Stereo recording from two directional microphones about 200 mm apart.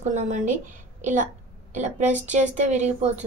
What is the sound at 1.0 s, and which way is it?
A woman's voice, 40° right (ahead or behind).